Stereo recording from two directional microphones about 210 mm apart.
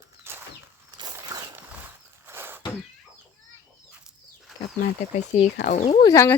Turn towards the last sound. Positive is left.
turn(degrees=15)  # may be behind; listen again after turning